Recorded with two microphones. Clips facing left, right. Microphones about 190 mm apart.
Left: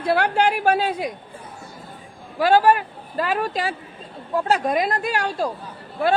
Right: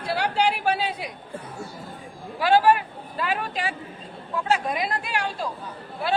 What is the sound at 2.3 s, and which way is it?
A man's voice, 45° left (ahead or behind).